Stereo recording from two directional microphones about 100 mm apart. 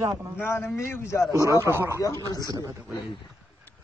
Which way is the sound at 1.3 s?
30° right (ahead or behind).